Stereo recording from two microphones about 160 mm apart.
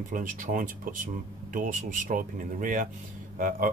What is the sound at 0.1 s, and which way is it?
Speech, 55° right (ahead or behind).